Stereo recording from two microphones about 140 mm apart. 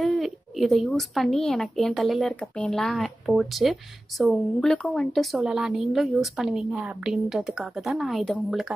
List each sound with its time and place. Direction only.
0.0 s speech: centre (ahead or behind)